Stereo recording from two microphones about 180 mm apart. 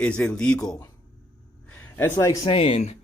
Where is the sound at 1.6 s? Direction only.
10° left (ahead or behind).